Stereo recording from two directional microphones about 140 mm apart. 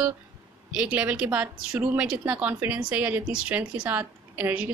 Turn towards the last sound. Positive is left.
turn(degrees=-10)  # may be behind; listen again after turning